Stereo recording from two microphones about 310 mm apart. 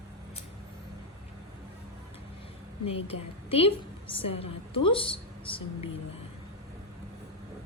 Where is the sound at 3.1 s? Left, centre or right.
Centre.